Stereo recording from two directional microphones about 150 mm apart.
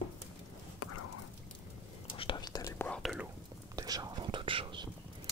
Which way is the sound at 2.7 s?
15° left (ahead or behind).